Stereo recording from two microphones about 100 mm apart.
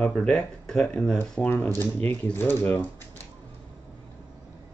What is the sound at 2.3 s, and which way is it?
Speech, 20° left (ahead or behind).